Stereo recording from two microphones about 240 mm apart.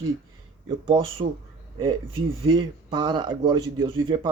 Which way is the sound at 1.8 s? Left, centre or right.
Right.